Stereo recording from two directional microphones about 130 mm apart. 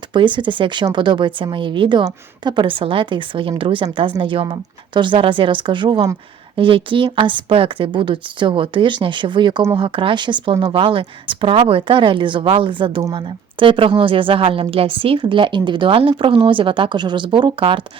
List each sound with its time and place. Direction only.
0.1 s a woman's voice: 40° right (ahead or behind)